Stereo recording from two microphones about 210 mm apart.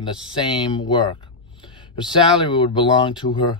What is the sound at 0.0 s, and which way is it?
Speech, 20° left (ahead or behind).